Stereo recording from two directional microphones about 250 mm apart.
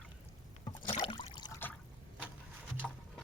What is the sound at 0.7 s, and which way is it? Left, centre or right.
Rowboat, centre.